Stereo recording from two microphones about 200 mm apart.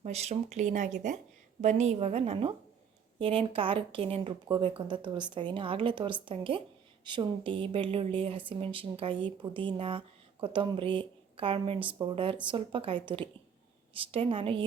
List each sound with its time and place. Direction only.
0.0 s speech: 30° right (ahead or behind)